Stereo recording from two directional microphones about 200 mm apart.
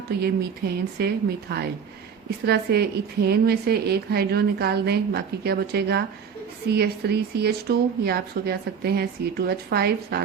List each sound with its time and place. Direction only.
0.6 s a woman's voice: 55° right (ahead or behind)